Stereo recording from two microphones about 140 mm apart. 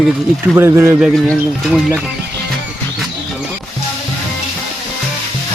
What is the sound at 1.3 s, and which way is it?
Speech, centre (ahead or behind).